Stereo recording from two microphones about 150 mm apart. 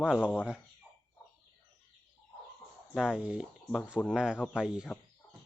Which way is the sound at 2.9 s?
5° right (ahead or behind).